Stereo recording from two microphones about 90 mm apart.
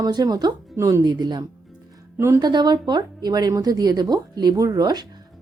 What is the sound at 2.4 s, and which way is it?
Speech, 50° right (ahead or behind).